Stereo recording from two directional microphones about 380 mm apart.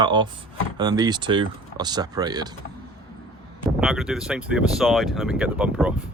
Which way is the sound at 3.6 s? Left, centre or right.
Centre.